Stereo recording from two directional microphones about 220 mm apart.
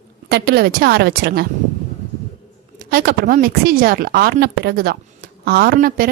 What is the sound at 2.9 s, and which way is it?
A woman's voice, 40° right (ahead or behind).